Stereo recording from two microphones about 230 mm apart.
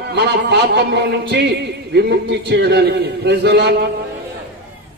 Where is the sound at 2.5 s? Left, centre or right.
Right.